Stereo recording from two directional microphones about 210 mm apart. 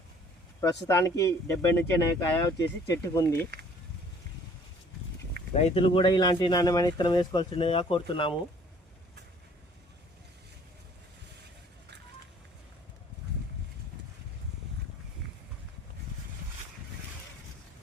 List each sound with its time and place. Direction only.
0.6 s speech: 15° left (ahead or behind)
3.3 s speech: 50° right (ahead or behind)
5.5 s speech: 30° left (ahead or behind)